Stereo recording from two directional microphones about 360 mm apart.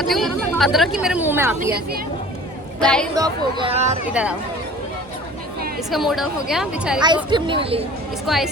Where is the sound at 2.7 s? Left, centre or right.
Centre.